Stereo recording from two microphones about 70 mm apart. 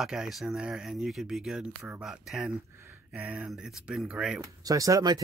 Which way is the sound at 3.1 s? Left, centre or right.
Centre.